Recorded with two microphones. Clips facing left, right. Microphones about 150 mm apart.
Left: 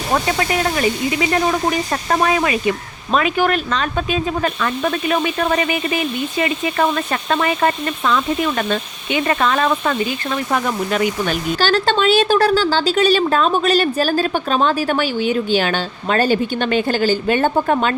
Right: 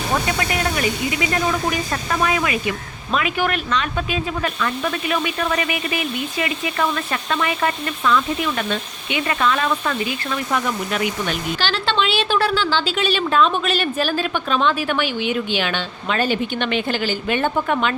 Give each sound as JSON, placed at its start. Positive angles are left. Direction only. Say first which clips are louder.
{"t": 0.3, "sound": "speech", "louder": "left 3 dB", "side_deg": 30}